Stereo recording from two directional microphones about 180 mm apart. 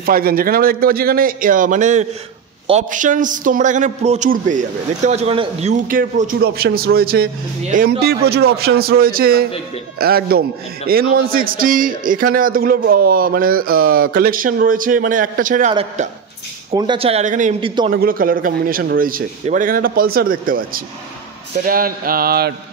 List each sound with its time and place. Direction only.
0.0 s a man's voice: 55° right (ahead or behind)
7.6 s a man's voice: 45° right (ahead or behind)
8.0 s a man's voice: 60° right (ahead or behind)
15.7 s speech: 35° right (ahead or behind)
17.6 s a man's voice: 30° right (ahead or behind)
17.9 s a man's voice: 55° right (ahead or behind)